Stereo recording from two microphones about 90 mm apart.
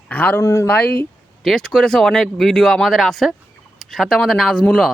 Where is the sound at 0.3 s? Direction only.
35° left (ahead or behind).